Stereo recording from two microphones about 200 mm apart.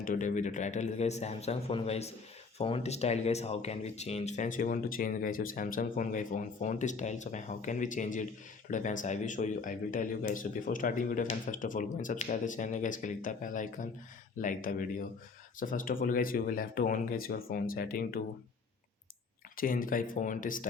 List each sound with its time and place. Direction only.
0.0 s speech: 40° left (ahead or behind)
19.5 s speech: 45° left (ahead or behind)